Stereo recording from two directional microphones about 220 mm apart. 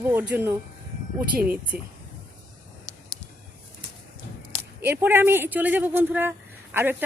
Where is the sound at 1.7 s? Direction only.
45° right (ahead or behind).